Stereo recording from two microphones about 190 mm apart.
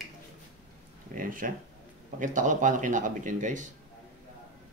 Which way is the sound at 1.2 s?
45° right (ahead or behind).